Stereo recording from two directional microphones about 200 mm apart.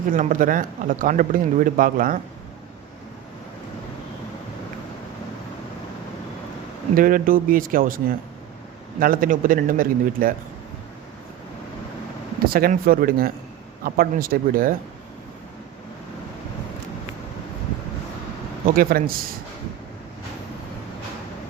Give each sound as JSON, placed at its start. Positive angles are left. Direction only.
{"t": 0.1, "sound": "a man's voice", "side_deg": -40}
{"t": 6.9, "sound": "a man's voice", "side_deg": -45}
{"t": 12.5, "sound": "a man's voice", "side_deg": -50}
{"t": 18.6, "sound": "a man's voice", "side_deg": -45}